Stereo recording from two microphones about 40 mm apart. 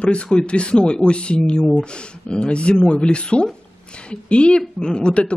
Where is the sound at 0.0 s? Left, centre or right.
Left.